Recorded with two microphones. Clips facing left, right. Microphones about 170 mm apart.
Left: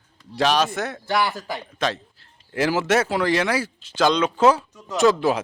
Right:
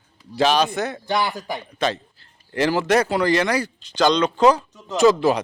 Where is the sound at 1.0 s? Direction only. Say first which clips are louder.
Left 3 dB; 15° right (ahead or behind).